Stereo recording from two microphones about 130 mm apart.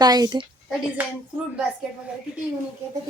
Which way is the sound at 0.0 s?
30° right (ahead or behind).